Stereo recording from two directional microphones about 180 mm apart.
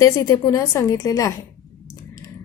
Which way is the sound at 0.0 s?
15° left (ahead or behind).